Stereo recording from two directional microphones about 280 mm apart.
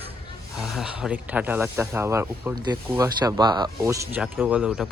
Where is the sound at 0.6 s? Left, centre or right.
Centre.